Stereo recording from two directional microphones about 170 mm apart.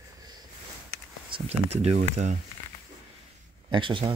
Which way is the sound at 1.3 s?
40° right (ahead or behind).